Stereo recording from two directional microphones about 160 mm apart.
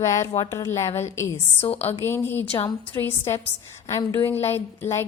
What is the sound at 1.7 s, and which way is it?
Speech, 40° left (ahead or behind).